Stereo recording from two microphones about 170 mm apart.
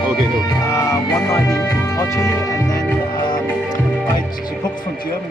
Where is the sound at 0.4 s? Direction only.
15° left (ahead or behind).